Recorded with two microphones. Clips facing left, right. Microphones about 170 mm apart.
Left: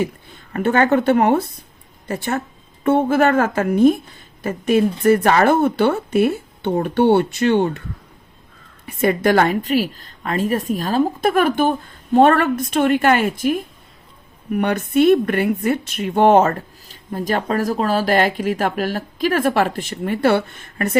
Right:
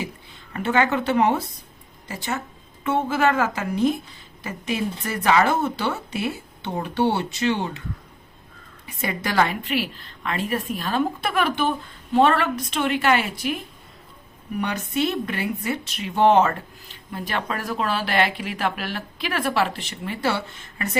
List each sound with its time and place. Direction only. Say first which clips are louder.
0.0 s speech: left 9 dB; 50° left (ahead or behind)
8.9 s speech: left 11 dB; 55° left (ahead or behind)
14.5 s speech: left 8 dB; 60° left (ahead or behind)